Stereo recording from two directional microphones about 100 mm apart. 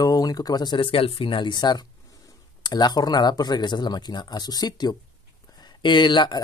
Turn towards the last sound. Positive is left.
turn(degrees=50)  # may be behind; listen again after turning